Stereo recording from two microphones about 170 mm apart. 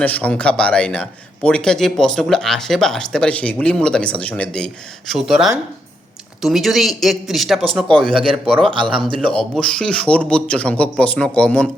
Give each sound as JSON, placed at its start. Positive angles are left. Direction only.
{"t": 0.0, "sound": "a man's voice", "side_deg": 10}
{"t": 8.1, "sound": "speech", "side_deg": -30}
{"t": 9.2, "sound": "speech", "side_deg": 5}